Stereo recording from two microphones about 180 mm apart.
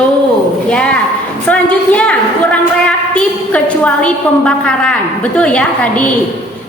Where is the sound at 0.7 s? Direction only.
5° left (ahead or behind).